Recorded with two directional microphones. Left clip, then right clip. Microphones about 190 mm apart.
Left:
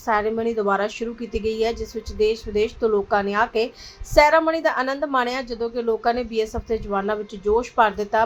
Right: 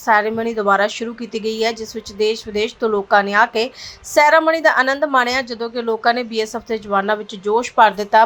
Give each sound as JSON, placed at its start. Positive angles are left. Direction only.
{"t": 0.0, "sound": "a woman's voice", "side_deg": -15}